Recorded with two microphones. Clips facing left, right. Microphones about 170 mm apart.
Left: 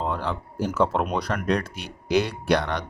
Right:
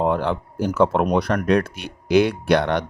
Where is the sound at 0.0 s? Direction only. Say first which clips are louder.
Right 7 dB; 60° right (ahead or behind).